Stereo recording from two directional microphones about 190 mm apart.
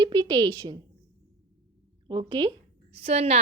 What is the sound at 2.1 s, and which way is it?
Speech, 25° right (ahead or behind).